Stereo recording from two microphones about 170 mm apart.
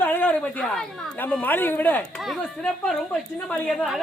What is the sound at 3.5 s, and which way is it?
Speech, centre (ahead or behind).